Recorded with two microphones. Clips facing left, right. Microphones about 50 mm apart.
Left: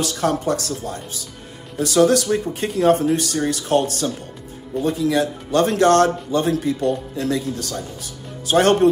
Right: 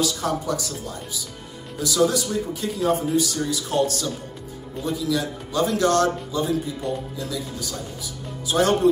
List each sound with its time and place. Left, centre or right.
0.0 s speech: left
7.2 s speech: left